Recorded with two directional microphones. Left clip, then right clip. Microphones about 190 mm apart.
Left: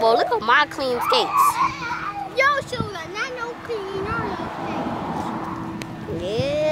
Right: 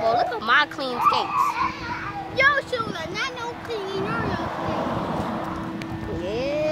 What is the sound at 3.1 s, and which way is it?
Vehicle, 40° right (ahead or behind).